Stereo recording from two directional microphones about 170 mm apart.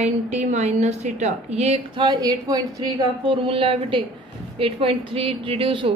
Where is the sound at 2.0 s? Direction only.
20° right (ahead or behind).